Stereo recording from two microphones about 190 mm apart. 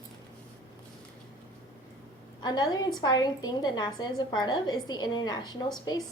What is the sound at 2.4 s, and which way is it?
A woman's voice, 20° left (ahead or behind).